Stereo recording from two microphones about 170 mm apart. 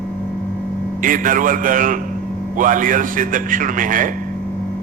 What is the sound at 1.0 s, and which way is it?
A man's voice, 50° right (ahead or behind).